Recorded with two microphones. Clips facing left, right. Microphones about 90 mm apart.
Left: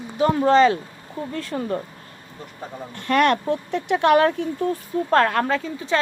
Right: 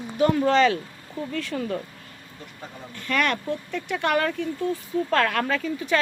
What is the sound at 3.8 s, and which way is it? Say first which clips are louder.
Speech: left 7 dB; 55° left (ahead or behind).